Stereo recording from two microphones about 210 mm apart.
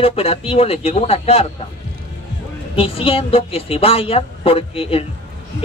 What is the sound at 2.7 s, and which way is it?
A man's voice, 25° left (ahead or behind).